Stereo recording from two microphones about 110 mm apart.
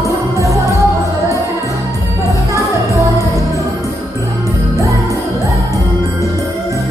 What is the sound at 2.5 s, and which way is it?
Music, 30° right (ahead or behind).